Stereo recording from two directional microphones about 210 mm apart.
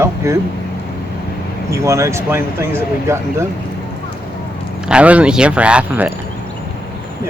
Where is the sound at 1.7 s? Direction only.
15° right (ahead or behind).